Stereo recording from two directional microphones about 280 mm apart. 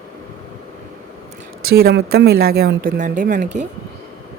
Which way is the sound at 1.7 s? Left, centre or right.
Right.